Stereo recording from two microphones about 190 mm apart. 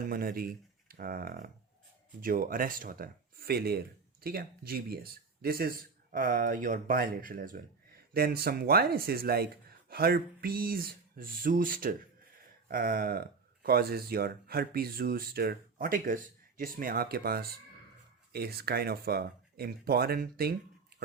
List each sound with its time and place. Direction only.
0.1 s speech: 50° right (ahead or behind)